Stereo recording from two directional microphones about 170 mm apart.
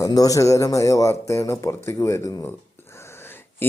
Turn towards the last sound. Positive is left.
turn(degrees=15)  # may be behind; listen again after turning